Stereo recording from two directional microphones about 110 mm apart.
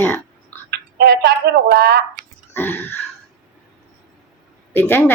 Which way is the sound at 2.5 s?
20° left (ahead or behind).